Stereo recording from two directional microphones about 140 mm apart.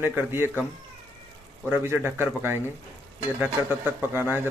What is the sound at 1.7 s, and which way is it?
A man's voice, 15° right (ahead or behind).